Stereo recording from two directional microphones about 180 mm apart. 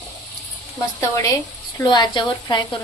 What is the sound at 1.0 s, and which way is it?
A woman's voice, 20° left (ahead or behind).